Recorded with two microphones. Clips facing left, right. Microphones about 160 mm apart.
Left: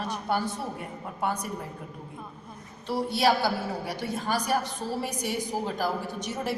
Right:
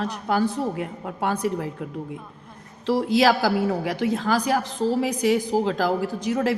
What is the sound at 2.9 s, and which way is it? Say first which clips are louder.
A woman's voice: right 6 dB; 90° right.